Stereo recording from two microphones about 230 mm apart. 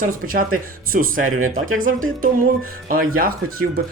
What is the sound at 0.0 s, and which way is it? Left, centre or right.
Speech, right.